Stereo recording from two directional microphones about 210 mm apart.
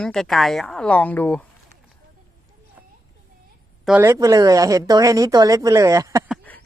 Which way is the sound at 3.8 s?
10° right (ahead or behind).